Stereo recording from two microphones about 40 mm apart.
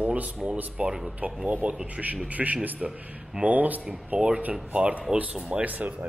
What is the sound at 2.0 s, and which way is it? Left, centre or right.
Speech, centre.